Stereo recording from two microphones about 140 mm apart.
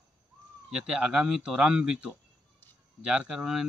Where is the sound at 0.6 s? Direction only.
5° right (ahead or behind).